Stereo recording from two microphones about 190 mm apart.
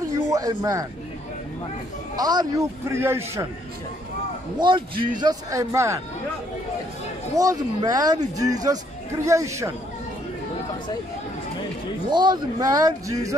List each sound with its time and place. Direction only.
0.3 s speech: 20° right (ahead or behind)
2.1 s a man's voice: 20° right (ahead or behind)
4.6 s a man's voice: 25° right (ahead or behind)
7.3 s a man's voice: 20° right (ahead or behind)
12.1 s a man's voice: 25° right (ahead or behind)